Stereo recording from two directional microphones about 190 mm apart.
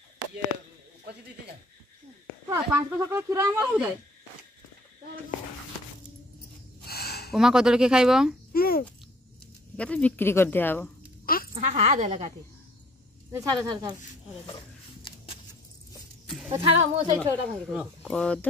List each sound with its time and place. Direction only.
1.1 s speech: 60° right (ahead or behind)
2.5 s speech: 15° right (ahead or behind)
6.8 s a sound: 55° left (ahead or behind)
7.3 s speech: 5° right (ahead or behind)
8.5 s babbling: 50° left (ahead or behind)
9.8 s speech: 5° left (ahead or behind)
11.5 s speech: 35° right (ahead or behind)
13.3 s speech: 20° right (ahead or behind)
15.1 s a sound: 25° left (ahead or behind)
16.5 s speech: 30° right (ahead or behind)
17.2 s speech: centre (ahead or behind)